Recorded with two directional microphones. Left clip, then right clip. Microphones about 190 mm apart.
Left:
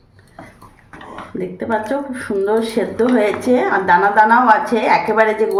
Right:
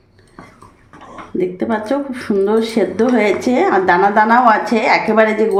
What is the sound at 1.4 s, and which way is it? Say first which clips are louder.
Speech: right 2 dB; 40° right (ahead or behind).